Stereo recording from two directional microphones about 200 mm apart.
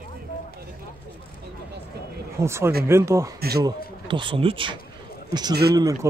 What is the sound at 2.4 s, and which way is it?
A man's voice, 15° right (ahead or behind).